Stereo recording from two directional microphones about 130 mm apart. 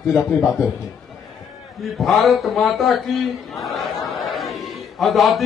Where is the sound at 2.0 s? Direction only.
Centre (ahead or behind).